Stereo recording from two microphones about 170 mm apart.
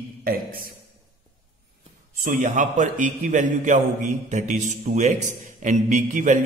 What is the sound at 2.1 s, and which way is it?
A man's voice, 50° right (ahead or behind).